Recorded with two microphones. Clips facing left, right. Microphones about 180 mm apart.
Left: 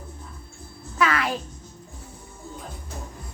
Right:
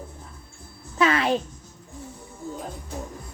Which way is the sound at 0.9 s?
25° right (ahead or behind).